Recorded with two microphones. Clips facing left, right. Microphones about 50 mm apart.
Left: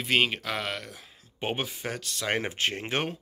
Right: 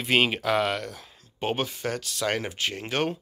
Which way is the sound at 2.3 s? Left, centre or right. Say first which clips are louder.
Left 1 dB; left.